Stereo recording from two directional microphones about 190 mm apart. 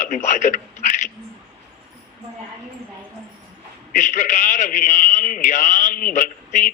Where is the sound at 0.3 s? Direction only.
40° left (ahead or behind).